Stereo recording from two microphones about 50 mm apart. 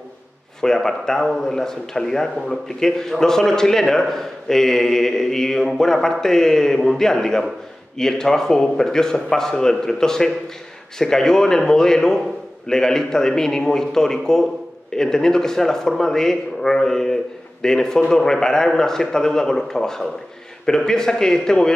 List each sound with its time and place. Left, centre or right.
0.6 s a man's voice: centre